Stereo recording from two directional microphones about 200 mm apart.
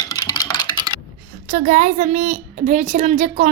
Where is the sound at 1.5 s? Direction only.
35° right (ahead or behind).